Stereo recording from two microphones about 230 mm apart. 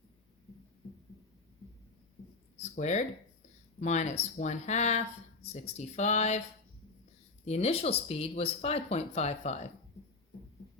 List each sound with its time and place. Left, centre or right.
2.6 s speech: left
7.4 s speech: left